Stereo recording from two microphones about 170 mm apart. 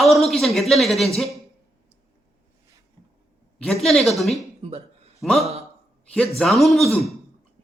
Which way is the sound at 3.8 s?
Centre (ahead or behind).